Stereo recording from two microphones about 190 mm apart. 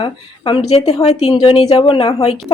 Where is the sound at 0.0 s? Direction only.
25° left (ahead or behind).